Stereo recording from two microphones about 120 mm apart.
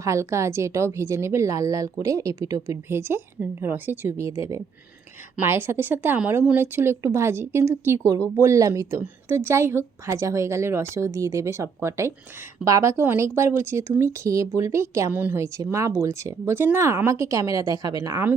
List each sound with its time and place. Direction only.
0.0 s a woman's voice: 25° right (ahead or behind)